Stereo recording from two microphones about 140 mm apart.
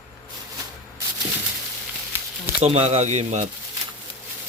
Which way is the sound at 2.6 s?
45° right (ahead or behind).